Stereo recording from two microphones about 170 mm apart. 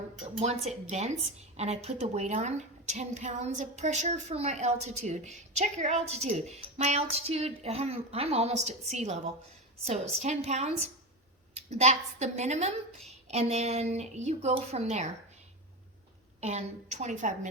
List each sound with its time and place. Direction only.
0.3 s a woman's voice: 40° right (ahead or behind)
16.4 s a woman's voice: 40° right (ahead or behind)